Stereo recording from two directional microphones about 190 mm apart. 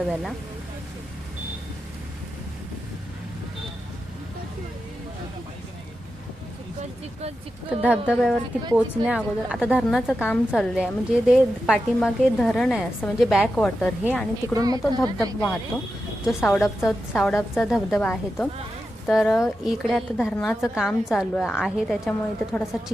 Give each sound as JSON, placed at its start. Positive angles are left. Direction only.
{"t": 0.1, "sound": "a woman's voice", "side_deg": 0}
{"t": 7.7, "sound": "a woman's voice", "side_deg": -5}
{"t": 14.0, "sound": "a woman's voice", "side_deg": -5}
{"t": 14.5, "sound": "a woman's voice", "side_deg": -20}
{"t": 16.6, "sound": "a woman's voice", "side_deg": 0}